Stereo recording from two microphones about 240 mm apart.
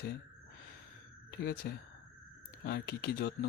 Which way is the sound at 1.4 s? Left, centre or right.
Left.